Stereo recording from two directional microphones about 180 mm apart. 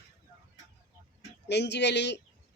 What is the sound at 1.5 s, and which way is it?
Speech, 70° left (ahead or behind).